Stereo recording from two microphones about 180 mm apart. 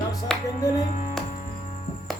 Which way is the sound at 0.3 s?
5° left (ahead or behind).